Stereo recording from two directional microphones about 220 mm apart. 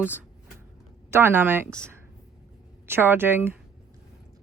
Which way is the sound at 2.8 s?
10° right (ahead or behind).